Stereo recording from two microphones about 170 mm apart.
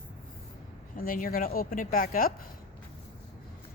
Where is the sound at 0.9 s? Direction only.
55° left (ahead or behind).